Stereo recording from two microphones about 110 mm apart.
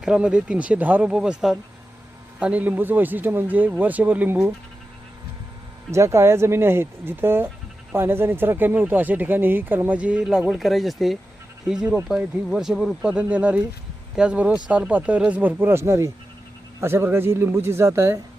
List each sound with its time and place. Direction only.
0.0 s speech: 10° right (ahead or behind)
5.9 s speech: 25° right (ahead or behind)